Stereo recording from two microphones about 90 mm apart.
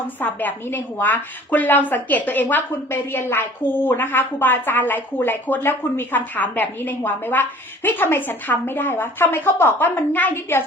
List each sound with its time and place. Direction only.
0.2 s a woman's voice: 20° left (ahead or behind)